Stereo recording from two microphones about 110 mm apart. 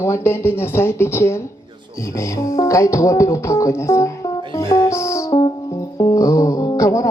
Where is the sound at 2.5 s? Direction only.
30° left (ahead or behind).